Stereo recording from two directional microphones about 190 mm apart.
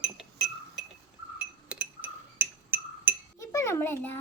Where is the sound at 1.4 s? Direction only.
5° right (ahead or behind).